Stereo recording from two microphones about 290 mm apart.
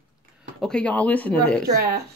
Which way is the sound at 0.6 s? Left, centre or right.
Centre.